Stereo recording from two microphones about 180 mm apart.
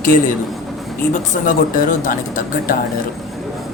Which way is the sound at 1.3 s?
50° left (ahead or behind).